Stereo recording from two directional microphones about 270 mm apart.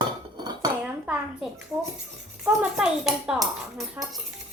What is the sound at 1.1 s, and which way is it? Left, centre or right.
Speech, centre.